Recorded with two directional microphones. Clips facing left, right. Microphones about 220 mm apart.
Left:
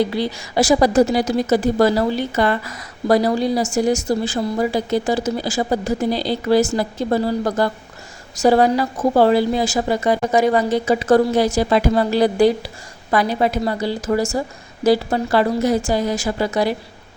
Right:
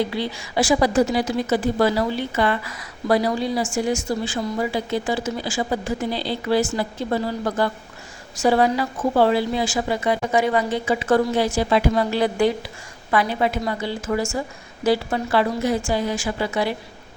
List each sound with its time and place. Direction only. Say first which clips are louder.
0.0 s a woman's voice: left 4 dB; 40° left (ahead or behind)